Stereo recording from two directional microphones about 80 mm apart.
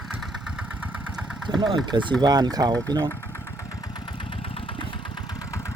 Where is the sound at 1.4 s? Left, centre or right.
Right.